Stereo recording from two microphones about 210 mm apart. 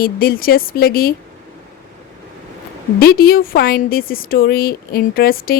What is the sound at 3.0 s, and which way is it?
A woman's voice, 45° left (ahead or behind).